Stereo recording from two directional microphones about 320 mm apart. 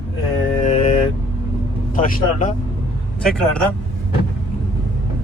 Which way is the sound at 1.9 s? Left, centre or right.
Left.